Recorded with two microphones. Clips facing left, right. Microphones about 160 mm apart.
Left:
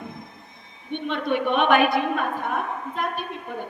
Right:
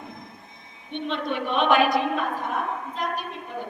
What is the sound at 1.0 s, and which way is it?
A woman's voice, 55° left (ahead or behind).